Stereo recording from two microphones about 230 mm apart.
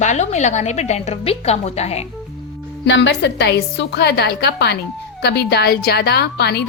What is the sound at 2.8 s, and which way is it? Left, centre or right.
A woman's voice, left.